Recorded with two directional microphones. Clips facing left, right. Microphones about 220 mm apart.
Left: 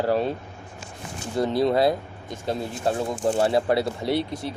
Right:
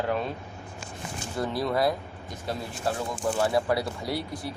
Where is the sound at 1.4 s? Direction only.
25° left (ahead or behind).